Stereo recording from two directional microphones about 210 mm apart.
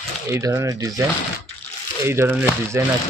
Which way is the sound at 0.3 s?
15° right (ahead or behind).